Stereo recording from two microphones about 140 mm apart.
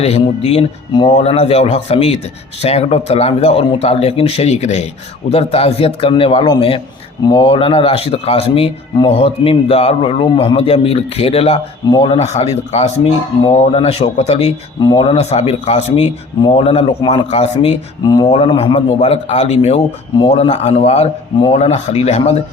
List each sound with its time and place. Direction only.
0.0 s a man's voice: 50° left (ahead or behind)
16.4 s a man's voice: 40° left (ahead or behind)
18.0 s speech: 30° left (ahead or behind)
18.3 s a man's voice: 40° left (ahead or behind)